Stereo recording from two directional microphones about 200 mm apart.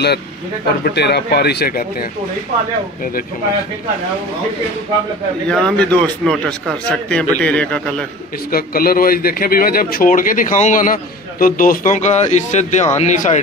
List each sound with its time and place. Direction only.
0.8 s speech: 55° left (ahead or behind)
5.5 s speech: 5° left (ahead or behind)
8.5 s speech: 45° left (ahead or behind)